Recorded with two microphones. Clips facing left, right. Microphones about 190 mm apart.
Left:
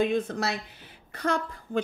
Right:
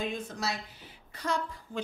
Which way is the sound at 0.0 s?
60° left (ahead or behind).